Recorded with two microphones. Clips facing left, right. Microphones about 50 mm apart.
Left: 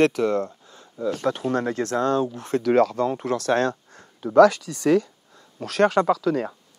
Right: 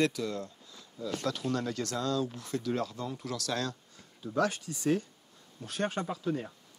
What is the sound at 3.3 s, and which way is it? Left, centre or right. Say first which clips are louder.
Speech: left 11 dB; left.